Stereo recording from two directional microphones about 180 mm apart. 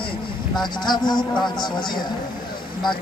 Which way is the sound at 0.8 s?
25° left (ahead or behind).